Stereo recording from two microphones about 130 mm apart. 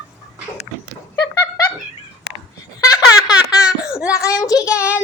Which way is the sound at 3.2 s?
5° right (ahead or behind).